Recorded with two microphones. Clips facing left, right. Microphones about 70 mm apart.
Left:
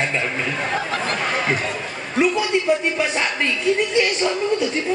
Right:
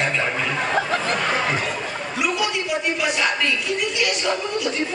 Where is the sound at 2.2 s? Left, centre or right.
Left.